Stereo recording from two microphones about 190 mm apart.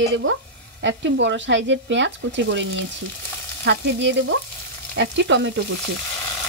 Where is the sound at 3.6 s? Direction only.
70° right (ahead or behind).